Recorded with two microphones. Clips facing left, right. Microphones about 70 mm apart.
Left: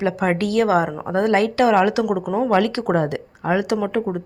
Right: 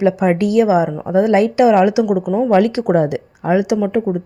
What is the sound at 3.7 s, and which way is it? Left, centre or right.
Speech, centre.